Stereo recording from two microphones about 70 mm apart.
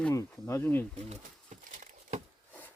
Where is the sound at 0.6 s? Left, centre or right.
Left.